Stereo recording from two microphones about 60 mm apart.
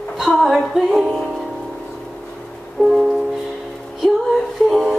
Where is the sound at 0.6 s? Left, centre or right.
Centre.